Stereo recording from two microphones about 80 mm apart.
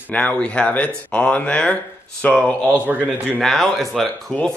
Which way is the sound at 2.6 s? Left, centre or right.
Centre.